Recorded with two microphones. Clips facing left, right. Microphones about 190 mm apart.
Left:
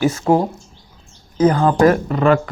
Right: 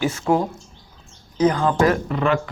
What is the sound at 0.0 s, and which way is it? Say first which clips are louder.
Speech: left 4 dB; 40° left (ahead or behind).